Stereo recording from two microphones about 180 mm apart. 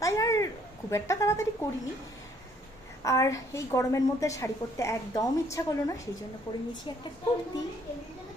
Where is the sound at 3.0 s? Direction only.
20° left (ahead or behind).